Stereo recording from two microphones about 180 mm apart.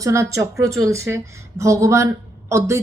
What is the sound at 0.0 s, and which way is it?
Speech, 15° right (ahead or behind).